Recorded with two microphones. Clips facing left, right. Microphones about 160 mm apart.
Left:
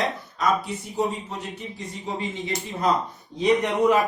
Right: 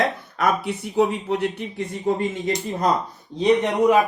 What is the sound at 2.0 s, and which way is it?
Speech, 50° right (ahead or behind).